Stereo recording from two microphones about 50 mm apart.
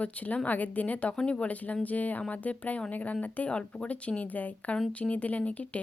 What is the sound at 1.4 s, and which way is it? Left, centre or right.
A woman's voice, left.